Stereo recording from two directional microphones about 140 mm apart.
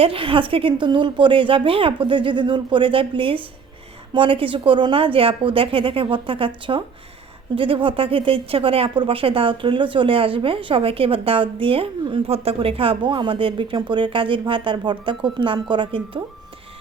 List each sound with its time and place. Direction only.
0.0 s speech: 40° right (ahead or behind)